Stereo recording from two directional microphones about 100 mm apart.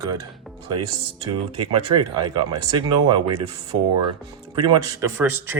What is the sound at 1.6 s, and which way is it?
Speech, 60° right (ahead or behind).